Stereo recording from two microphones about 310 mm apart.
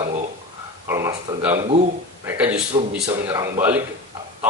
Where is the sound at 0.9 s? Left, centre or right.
Centre.